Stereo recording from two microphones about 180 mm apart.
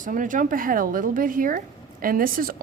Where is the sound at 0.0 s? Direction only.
45° right (ahead or behind).